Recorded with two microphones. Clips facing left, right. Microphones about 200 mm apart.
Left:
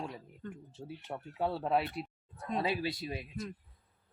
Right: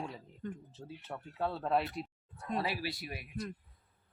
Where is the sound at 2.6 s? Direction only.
20° left (ahead or behind).